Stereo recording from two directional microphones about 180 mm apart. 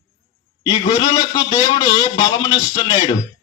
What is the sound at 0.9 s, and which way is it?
A man's voice, 25° left (ahead or behind).